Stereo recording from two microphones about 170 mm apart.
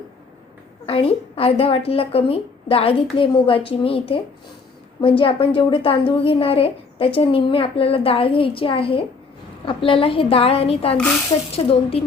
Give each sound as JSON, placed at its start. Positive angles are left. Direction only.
{"t": 0.9, "sound": "a woman's voice", "side_deg": 35}